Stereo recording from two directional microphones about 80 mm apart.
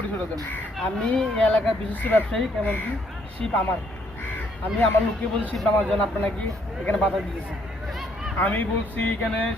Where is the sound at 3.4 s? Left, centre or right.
Centre.